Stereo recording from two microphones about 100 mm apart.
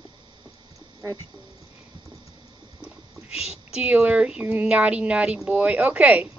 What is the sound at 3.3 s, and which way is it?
Speech, 10° right (ahead or behind).